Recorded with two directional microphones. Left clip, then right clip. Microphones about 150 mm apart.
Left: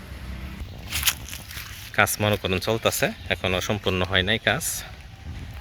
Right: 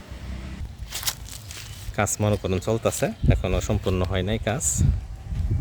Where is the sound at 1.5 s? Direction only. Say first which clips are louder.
Left 2 dB; 10° right (ahead or behind).